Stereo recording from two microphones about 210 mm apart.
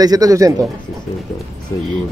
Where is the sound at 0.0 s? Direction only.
15° right (ahead or behind).